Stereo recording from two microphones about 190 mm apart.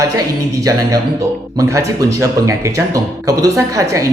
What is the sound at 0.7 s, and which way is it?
Speech, 20° right (ahead or behind).